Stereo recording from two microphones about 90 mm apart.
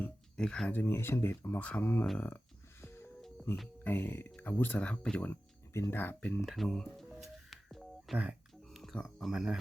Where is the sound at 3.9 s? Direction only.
20° left (ahead or behind).